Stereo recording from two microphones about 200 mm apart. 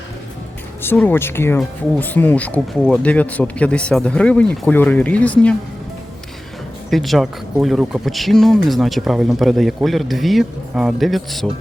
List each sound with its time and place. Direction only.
0.8 s speech: 10° left (ahead or behind)
6.9 s speech: centre (ahead or behind)